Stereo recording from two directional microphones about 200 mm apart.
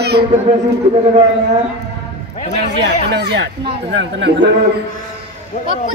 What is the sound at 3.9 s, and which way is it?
Speech, 65° right (ahead or behind).